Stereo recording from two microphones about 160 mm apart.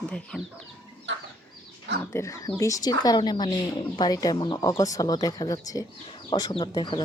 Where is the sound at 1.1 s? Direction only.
90° right.